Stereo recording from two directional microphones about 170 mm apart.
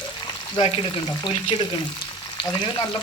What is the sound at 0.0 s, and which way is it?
Frying, 25° left (ahead or behind).